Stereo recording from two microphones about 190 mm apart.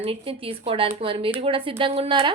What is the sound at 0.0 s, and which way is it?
A woman's voice, 30° right (ahead or behind).